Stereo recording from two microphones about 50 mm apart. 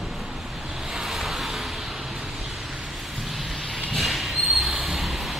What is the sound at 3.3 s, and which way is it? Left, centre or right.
Vehicle, centre.